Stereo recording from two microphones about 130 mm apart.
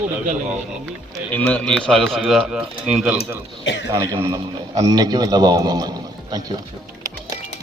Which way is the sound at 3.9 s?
20° right (ahead or behind).